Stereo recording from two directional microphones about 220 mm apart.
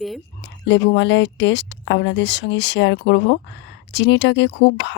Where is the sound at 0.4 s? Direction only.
55° left (ahead or behind).